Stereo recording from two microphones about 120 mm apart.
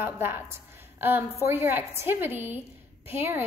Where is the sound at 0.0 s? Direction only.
20° right (ahead or behind).